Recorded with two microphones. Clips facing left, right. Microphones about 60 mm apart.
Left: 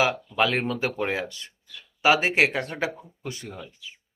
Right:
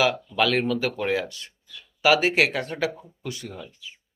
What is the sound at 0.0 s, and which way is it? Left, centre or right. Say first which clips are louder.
Speech: right 1 dB; left.